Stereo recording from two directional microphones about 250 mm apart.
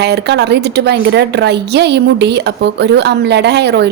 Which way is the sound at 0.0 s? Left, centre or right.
Right.